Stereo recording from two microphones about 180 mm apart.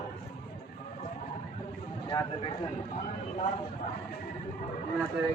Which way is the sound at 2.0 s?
25° left (ahead or behind).